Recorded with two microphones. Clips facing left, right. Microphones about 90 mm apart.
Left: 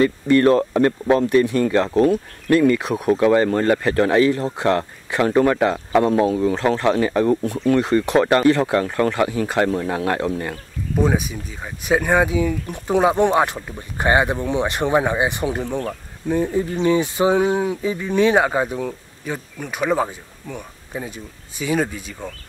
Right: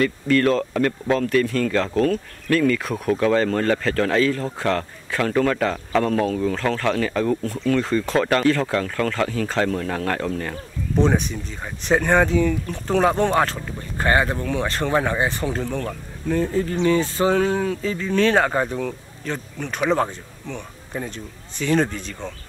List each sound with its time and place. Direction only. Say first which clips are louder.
0.0 s speech: left 4 dB; 25° left (ahead or behind)
11.0 s speech: even; 5° left (ahead or behind)